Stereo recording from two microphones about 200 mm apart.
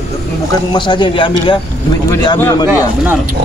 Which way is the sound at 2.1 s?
15° left (ahead or behind).